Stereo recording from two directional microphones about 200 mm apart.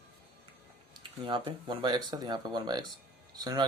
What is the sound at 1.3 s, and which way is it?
Speech, 20° right (ahead or behind).